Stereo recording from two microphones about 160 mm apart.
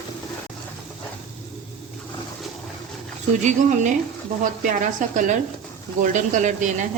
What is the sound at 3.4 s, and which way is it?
Speech, 50° right (ahead or behind).